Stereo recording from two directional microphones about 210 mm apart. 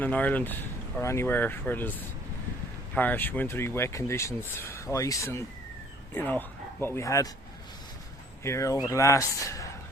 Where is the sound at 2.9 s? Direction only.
10° left (ahead or behind).